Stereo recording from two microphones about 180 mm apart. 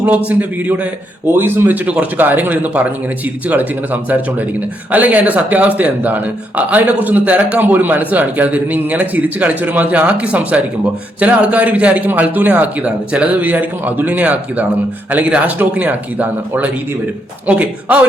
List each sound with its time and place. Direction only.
0.3 s speech: 10° right (ahead or behind)